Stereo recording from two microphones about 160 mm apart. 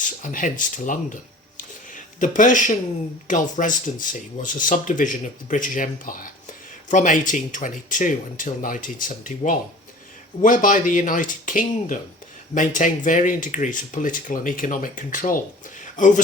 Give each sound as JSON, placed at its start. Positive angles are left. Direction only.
{"t": 0.0, "sound": "speech", "side_deg": 55}